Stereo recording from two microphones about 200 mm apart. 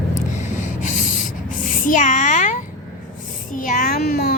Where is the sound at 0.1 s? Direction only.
35° left (ahead or behind).